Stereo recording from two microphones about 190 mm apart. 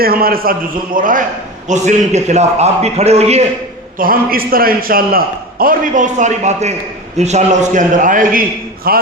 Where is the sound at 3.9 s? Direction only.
50° right (ahead or behind).